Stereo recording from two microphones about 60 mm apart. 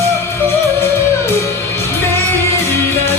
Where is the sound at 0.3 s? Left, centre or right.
Left.